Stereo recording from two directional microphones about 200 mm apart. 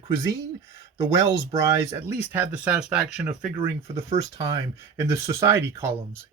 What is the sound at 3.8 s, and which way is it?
Speech, 35° right (ahead or behind).